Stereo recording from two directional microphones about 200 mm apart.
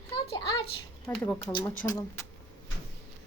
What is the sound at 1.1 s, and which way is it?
Speech, 5° left (ahead or behind).